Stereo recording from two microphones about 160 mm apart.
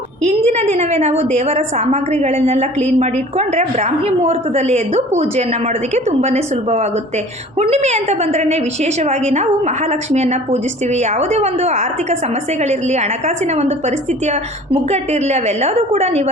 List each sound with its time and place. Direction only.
0.2 s a woman's voice: 45° right (ahead or behind)